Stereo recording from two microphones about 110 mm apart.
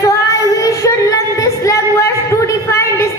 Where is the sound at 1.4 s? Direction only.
30° left (ahead or behind).